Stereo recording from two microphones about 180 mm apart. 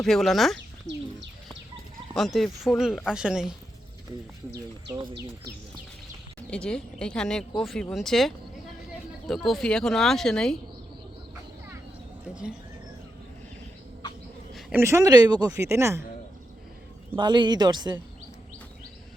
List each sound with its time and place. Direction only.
0.0 s speech: centre (ahead or behind)
2.1 s speech: centre (ahead or behind)
6.5 s speech: 5° left (ahead or behind)
12.3 s speech: 5° right (ahead or behind)
14.5 s speech: 10° right (ahead or behind)
17.2 s a woman's voice: 25° right (ahead or behind)